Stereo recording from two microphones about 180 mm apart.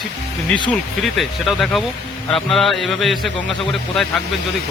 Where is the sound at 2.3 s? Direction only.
Centre (ahead or behind).